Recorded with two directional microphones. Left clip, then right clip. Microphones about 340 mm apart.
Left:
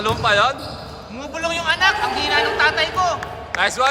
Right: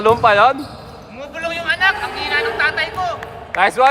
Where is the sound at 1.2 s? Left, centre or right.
Centre.